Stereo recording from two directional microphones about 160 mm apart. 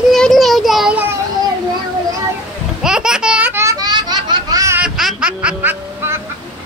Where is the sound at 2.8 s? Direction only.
5° right (ahead or behind); by 4.8 s 25° right (ahead or behind).